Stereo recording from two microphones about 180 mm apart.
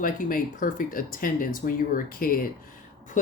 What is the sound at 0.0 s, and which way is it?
Speech, 50° left (ahead or behind).